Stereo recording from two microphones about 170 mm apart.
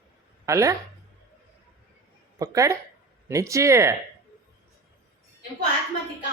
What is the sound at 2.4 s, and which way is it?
Speech, 20° right (ahead or behind).